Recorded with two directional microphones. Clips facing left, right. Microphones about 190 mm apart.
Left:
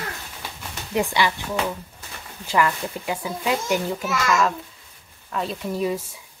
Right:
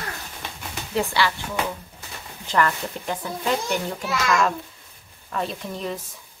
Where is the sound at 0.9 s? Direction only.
15° left (ahead or behind).